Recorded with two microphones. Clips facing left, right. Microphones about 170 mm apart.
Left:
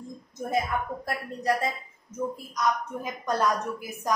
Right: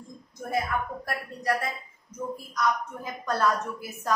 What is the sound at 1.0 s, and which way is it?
A woman's voice, 20° left (ahead or behind).